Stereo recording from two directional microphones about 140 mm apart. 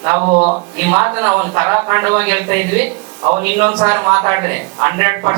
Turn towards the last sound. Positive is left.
turn(degrees=-15)  # may be behind; listen again after turning